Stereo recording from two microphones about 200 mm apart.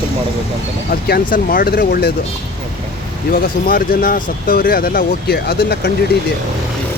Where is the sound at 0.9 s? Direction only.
50° left (ahead or behind).